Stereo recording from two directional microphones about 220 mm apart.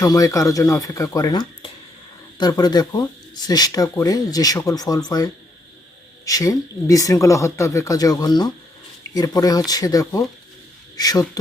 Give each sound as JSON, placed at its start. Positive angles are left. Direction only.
{"t": 0.0, "sound": "speech", "side_deg": 15}